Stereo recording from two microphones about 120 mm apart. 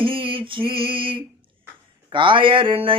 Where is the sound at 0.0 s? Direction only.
45° right (ahead or behind).